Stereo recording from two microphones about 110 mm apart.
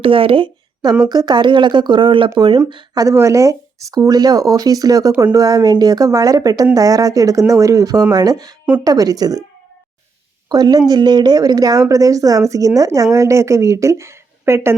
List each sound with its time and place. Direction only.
0.0 s speech: 55° right (ahead or behind)
1.0 s a woman's voice: 40° right (ahead or behind)
10.5 s a woman's voice: 35° right (ahead or behind)